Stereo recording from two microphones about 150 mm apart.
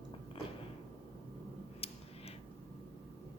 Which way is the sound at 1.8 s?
40° left (ahead or behind).